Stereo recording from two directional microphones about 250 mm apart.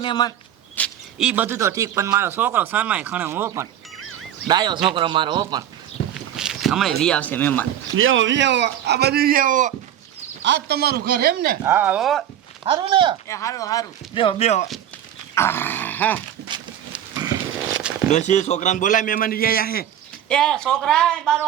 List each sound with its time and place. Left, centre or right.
0.0 s speech: centre
0.8 s speech: centre
6.1 s speech: centre
7.9 s a man's voice: right
10.4 s a man's voice: right
11.6 s speech: centre
12.6 s speech: right
13.2 s speech: centre
15.4 s speech: centre
18.1 s a man's voice: left
20.2 s speech: centre